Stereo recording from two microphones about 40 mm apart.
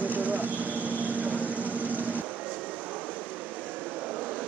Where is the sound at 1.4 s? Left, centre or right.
Right.